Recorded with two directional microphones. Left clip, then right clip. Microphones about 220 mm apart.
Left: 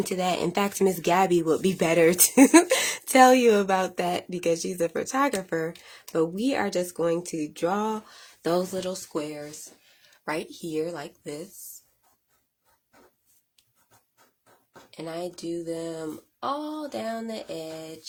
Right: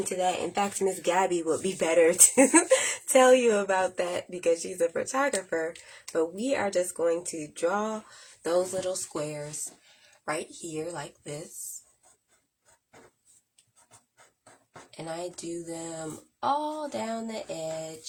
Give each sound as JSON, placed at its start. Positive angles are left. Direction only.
{"t": 0.2, "sound": "speech", "side_deg": 45}
{"t": 14.8, "sound": "speech", "side_deg": 25}